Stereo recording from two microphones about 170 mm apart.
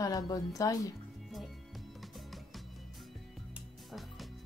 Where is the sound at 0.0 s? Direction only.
20° left (ahead or behind).